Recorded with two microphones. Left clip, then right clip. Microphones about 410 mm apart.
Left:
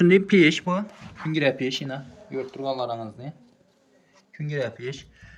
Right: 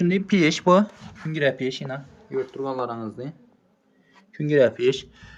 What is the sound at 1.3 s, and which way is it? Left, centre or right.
Speech, centre.